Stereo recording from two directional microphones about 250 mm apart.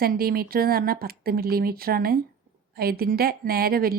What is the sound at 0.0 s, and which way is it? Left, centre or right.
Speech, right.